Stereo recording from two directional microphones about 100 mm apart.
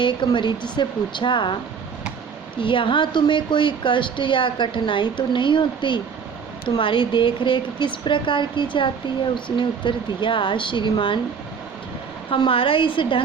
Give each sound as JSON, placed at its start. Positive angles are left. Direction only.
{"t": 0.0, "sound": "speech", "side_deg": 50}
{"t": 2.6, "sound": "speech", "side_deg": 55}
{"t": 12.5, "sound": "speech", "side_deg": 60}